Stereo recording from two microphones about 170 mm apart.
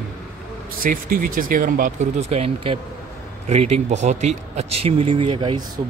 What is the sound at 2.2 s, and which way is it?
Speech, 40° right (ahead or behind).